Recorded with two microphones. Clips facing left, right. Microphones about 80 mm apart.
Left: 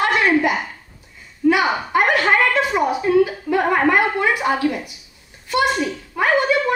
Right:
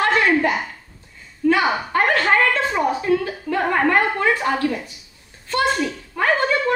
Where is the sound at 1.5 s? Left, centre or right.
Centre.